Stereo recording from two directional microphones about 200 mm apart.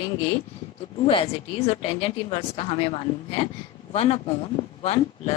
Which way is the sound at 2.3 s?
30° left (ahead or behind).